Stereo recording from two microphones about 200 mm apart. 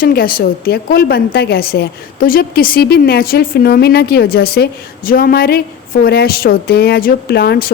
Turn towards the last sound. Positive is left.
turn(degrees=50)  # may be behind; listen again after turning